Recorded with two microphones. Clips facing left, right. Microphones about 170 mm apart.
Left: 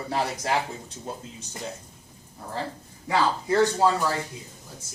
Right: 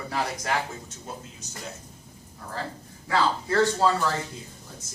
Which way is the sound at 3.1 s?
15° left (ahead or behind).